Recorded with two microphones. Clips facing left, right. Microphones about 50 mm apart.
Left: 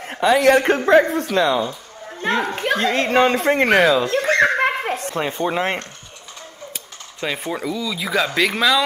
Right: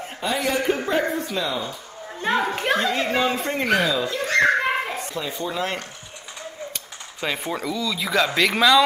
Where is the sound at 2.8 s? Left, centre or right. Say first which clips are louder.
Left 5 dB; left.